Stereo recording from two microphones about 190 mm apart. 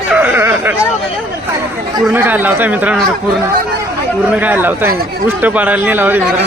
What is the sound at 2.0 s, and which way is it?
A man's voice, 10° right (ahead or behind).